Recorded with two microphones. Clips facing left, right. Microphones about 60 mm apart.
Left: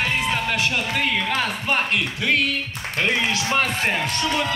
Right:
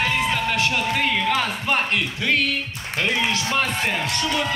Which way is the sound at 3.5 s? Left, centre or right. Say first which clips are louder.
Left 1 dB; left.